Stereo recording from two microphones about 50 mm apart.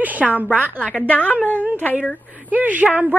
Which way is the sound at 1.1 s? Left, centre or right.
Left.